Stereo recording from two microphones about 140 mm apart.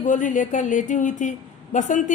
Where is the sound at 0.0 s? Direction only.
65° left (ahead or behind).